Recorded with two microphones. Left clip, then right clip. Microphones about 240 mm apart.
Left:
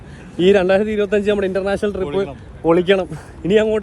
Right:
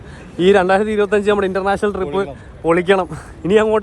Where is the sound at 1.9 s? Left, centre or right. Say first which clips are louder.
Right 1 dB; right.